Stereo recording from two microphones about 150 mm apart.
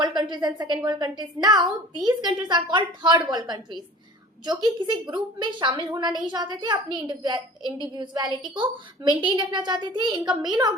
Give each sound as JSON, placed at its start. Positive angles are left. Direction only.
{"t": 0.2, "sound": "a woman's voice", "side_deg": -30}